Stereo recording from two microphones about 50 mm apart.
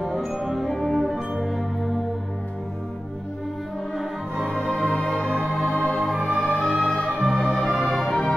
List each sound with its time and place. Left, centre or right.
0.0 s music: centre
0.7 s music: centre
4.5 s music: centre
5.7 s music: left
6.7 s music: right
7.0 s music: centre
7.4 s music: centre
7.7 s music: centre